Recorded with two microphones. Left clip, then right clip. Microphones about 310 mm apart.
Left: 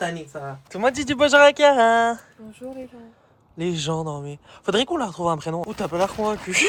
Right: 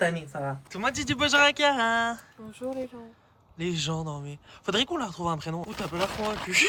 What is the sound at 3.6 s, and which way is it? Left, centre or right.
Speech, centre.